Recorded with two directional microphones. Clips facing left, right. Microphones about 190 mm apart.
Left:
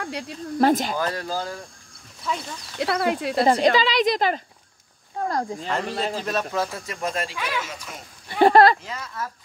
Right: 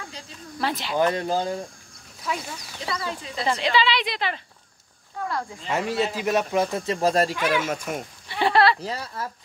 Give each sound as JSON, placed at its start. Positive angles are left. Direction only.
{"t": 0.0, "sound": "speech", "side_deg": 65}
{"t": 0.6, "sound": "speech", "side_deg": 45}
{"t": 0.9, "sound": "speech", "side_deg": -20}
{"t": 2.2, "sound": "speech", "side_deg": -10}
{"t": 2.8, "sound": "speech", "side_deg": 65}
{"t": 3.4, "sound": "speech", "side_deg": 45}
{"t": 5.7, "sound": "speech", "side_deg": -10}
{"t": 7.6, "sound": "speech", "side_deg": -50}
{"t": 8.3, "sound": "speech", "side_deg": 45}
{"t": 8.8, "sound": "speech", "side_deg": -35}